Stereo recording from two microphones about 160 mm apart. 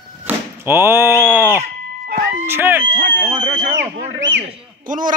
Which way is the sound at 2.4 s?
15° right (ahead or behind).